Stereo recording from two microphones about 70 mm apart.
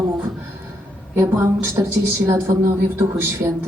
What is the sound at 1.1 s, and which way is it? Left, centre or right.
A woman's voice, right.